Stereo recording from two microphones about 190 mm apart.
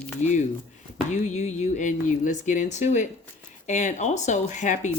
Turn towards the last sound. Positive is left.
turn(degrees=40)  # may be behind; listen again after turning